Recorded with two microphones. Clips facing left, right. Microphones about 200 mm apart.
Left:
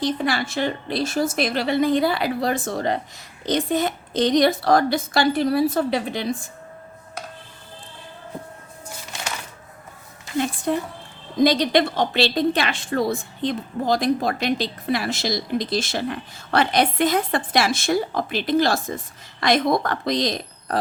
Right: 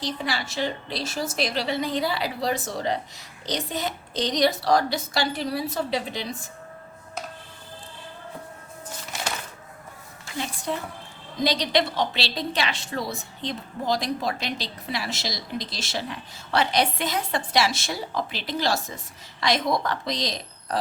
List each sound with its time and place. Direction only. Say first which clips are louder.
0.0 s a woman's voice: left 7 dB; 55° left (ahead or behind)
10.3 s a woman's voice: left 7 dB; 55° left (ahead or behind)